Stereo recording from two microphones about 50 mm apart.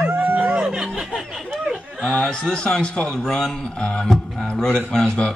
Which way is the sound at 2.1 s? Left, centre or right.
Left.